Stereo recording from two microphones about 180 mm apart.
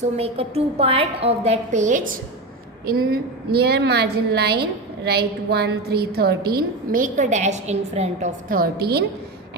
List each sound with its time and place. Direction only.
0.0 s a woman's voice: 35° right (ahead or behind)
2.8 s a woman's voice: 55° right (ahead or behind)